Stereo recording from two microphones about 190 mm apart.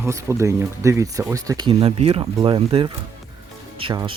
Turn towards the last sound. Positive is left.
turn(degrees=-25)  # may be behind; listen again after turning